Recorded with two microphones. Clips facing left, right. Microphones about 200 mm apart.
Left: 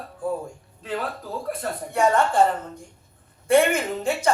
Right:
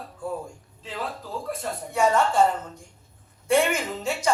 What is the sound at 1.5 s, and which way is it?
Speech, 55° left (ahead or behind).